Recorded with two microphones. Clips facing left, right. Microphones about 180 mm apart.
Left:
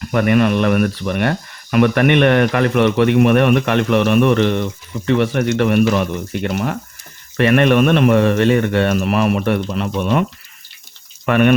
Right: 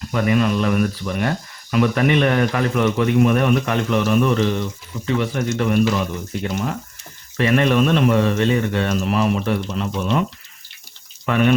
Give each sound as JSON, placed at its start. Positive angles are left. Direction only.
{"t": 0.1, "sound": "speech", "side_deg": 60}
{"t": 11.3, "sound": "speech", "side_deg": 65}